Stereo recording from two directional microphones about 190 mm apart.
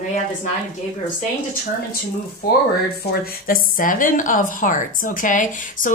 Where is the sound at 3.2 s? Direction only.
50° left (ahead or behind).